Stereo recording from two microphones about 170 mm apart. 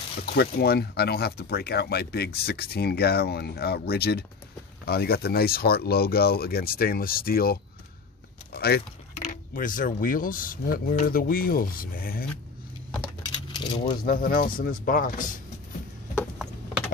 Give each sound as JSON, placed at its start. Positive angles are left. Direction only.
{"t": 0.2, "sound": "speech", "side_deg": 70}
{"t": 8.5, "sound": "speech", "side_deg": 70}
{"t": 9.2, "sound": "speech", "side_deg": 55}
{"t": 13.0, "sound": "keys jangling", "side_deg": 25}
{"t": 14.0, "sound": "speech", "side_deg": 55}